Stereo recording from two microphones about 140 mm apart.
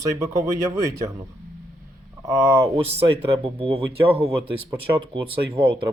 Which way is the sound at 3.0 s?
45° right (ahead or behind).